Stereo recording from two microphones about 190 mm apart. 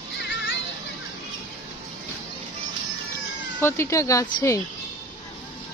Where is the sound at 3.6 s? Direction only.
15° left (ahead or behind).